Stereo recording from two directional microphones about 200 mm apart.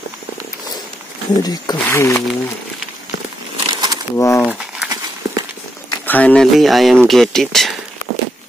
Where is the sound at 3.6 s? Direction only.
20° right (ahead or behind).